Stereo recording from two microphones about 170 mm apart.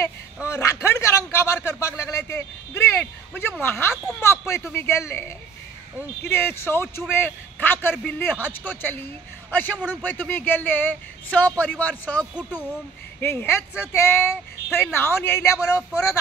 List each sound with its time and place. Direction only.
0.5 s a sound: 15° left (ahead or behind)
3.6 s a man's voice: 15° left (ahead or behind)
6.2 s a man's voice: 15° left (ahead or behind)
12.4 s speech: 5° right (ahead or behind)
13.2 s a man's voice: 15° left (ahead or behind)